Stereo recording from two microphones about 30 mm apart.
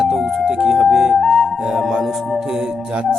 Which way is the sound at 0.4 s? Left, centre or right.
Right.